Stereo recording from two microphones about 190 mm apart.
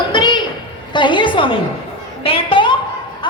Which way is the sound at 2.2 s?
30° left (ahead or behind).